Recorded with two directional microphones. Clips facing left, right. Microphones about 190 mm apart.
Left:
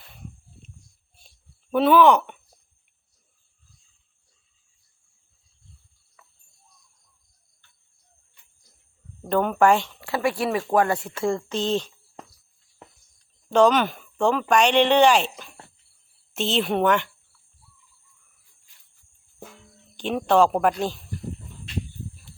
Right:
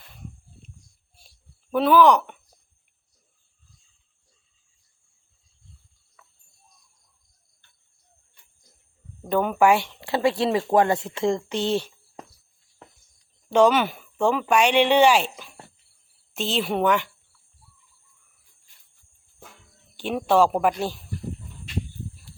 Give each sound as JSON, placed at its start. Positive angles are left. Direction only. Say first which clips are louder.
{"t": 1.7, "sound": "a woman's voice", "louder": "left 1 dB", "side_deg": 0}
{"t": 6.2, "sound": "cricket", "louder": "even", "side_deg": 0}
{"t": 9.3, "sound": "speech", "louder": "even", "side_deg": -5}
{"t": 10.0, "sound": "speech", "louder": "right 2 dB", "side_deg": -25}
{"t": 13.5, "sound": "a woman's voice", "louder": "even", "side_deg": -10}
{"t": 20.0, "sound": "speech", "louder": "left 1 dB", "side_deg": -5}